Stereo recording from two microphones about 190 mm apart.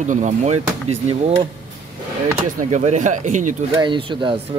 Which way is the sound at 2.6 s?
35° right (ahead or behind).